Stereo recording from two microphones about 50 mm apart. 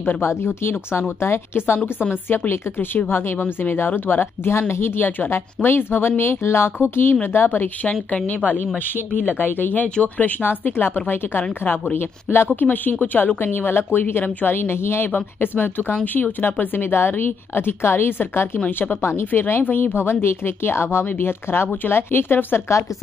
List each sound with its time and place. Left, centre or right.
0.2 s speech: left
2.2 s a woman's voice: left
4.6 s a woman's voice: left
8.9 s a woman's voice: left
15.1 s a woman's voice: left